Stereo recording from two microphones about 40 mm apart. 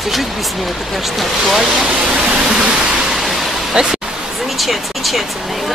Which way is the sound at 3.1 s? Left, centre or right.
Centre.